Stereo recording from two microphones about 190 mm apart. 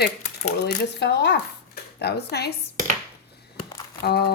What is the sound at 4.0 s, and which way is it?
Speech, 55° left (ahead or behind).